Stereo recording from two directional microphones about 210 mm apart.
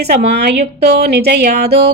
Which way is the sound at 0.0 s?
50° right (ahead or behind).